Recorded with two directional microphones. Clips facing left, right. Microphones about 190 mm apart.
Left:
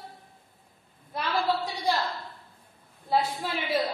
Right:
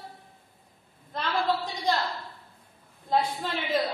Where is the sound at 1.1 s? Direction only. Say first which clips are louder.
Even; 10° left (ahead or behind).